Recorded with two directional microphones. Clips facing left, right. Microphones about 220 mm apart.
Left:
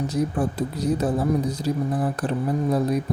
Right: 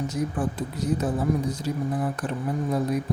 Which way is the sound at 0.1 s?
35° left (ahead or behind).